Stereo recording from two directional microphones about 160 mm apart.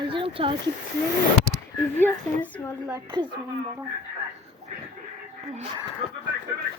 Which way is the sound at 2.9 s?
30° right (ahead or behind).